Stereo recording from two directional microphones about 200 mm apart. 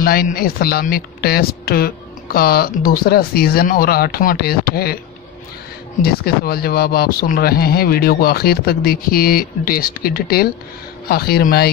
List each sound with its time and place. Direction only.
0.0 s speech: 50° left (ahead or behind)
6.0 s speech: 50° left (ahead or behind)